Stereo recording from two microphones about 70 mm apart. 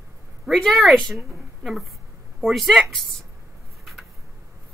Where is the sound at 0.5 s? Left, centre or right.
Centre.